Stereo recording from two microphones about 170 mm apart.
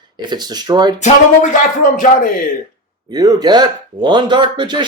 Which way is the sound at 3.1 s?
25° right (ahead or behind).